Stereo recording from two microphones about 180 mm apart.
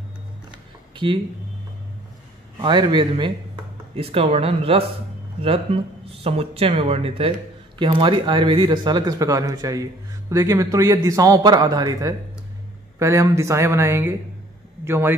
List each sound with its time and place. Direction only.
0.9 s speech: 25° right (ahead or behind)
2.6 s speech: 25° right (ahead or behind)